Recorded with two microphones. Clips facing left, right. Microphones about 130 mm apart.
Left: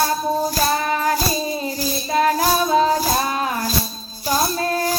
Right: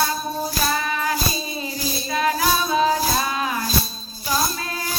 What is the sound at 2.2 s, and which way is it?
Music, 40° left (ahead or behind).